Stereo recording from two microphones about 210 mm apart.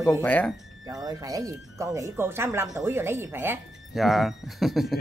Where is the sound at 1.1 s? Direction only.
20° right (ahead or behind); by 5.0 s centre (ahead or behind).